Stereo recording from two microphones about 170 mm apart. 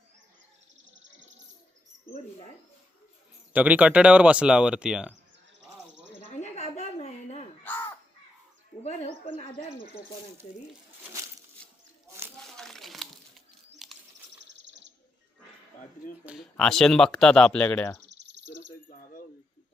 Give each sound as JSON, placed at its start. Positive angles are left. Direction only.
{"t": 0.9, "sound": "bird", "side_deg": -90}
{"t": 3.5, "sound": "speech", "side_deg": -10}
{"t": 6.4, "sound": "a sound", "side_deg": 40}
{"t": 7.7, "sound": "crow", "side_deg": 10}
{"t": 8.8, "sound": "a sound", "side_deg": 40}
{"t": 12.5, "sound": "crumpling", "side_deg": 5}
{"t": 13.8, "sound": "chirp", "side_deg": 0}
{"t": 14.4, "sound": "bird", "side_deg": -90}
{"t": 16.2, "sound": "speech", "side_deg": -5}
{"t": 18.0, "sound": "bird", "side_deg": -90}